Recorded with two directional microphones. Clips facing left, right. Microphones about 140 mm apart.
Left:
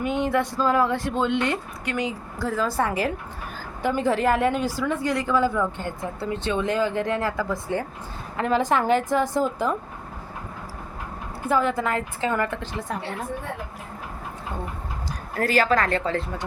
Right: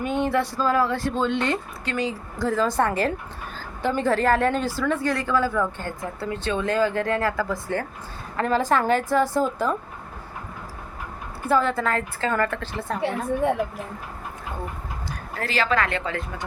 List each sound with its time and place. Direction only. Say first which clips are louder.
0.0 s a woman's voice: even; 15° left (ahead or behind)
2.4 s a woman's voice: right 2 dB; 5° left (ahead or behind)
11.4 s a woman's voice: right 1 dB; 15° left (ahead or behind)
15.4 s a woman's voice: left 3 dB; 45° left (ahead or behind)